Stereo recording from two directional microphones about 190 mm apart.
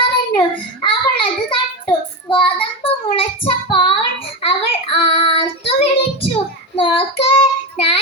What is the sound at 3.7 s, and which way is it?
Child singing, 30° left (ahead or behind).